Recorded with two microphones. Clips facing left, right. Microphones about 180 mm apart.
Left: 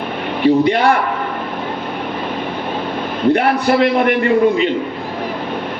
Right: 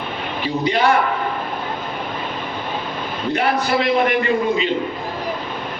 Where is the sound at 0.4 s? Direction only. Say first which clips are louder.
Left 10 dB; 55° left (ahead or behind).